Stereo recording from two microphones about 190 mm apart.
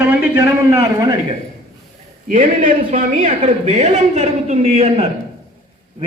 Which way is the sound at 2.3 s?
45° right (ahead or behind).